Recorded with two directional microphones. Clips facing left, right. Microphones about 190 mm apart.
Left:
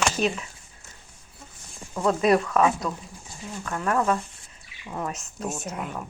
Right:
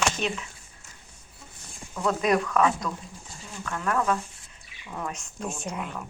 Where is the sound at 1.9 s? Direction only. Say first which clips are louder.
Left 3 dB; 30° left (ahead or behind).